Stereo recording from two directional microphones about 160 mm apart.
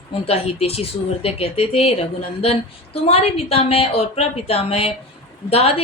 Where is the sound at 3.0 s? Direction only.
40° left (ahead or behind).